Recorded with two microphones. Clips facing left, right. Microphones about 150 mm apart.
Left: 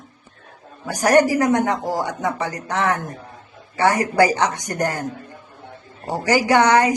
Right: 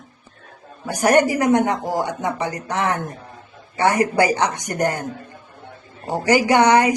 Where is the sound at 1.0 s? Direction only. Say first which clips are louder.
Even; 20° right (ahead or behind).